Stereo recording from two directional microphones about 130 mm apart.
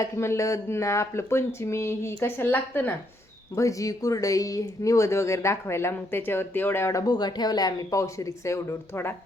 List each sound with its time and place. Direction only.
0.0 s speech: 20° left (ahead or behind)